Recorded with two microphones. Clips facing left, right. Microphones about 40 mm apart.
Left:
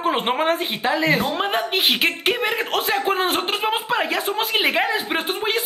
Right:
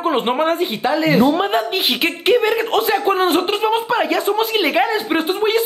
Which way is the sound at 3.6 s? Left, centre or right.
Centre.